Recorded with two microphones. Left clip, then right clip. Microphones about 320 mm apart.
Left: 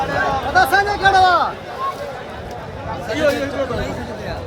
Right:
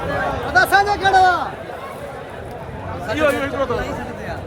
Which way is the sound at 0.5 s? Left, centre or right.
Centre.